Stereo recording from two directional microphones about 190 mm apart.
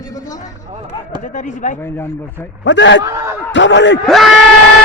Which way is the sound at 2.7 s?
70° left (ahead or behind).